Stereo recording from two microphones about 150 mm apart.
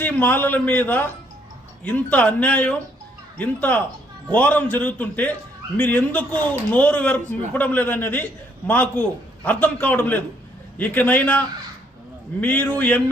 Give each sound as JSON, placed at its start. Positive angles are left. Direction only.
{"t": 0.0, "sound": "a man's voice", "side_deg": 15}